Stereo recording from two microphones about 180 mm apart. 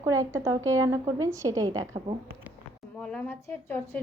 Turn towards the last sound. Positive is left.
turn(degrees=10)  # may be behind; listen again after turning